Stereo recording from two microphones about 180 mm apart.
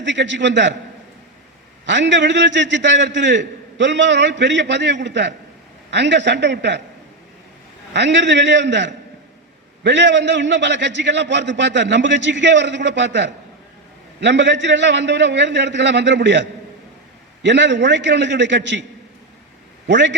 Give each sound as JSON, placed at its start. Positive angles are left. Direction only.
{"t": 0.0, "sound": "a man's voice", "side_deg": -80}
{"t": 1.9, "sound": "a man's voice", "side_deg": -80}
{"t": 7.9, "sound": "a man's voice", "side_deg": -75}
{"t": 19.9, "sound": "a man's voice", "side_deg": -80}